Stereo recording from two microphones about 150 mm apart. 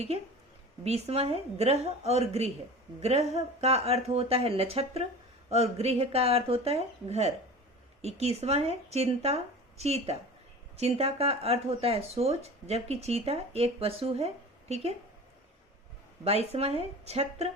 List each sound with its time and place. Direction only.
0.9 s speech: 45° right (ahead or behind)
16.2 s speech: 45° right (ahead or behind)